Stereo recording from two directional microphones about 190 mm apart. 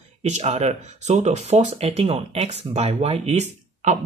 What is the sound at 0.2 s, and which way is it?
Speech, 35° right (ahead or behind).